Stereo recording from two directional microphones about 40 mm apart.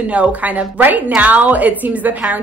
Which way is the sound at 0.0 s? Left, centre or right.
Right.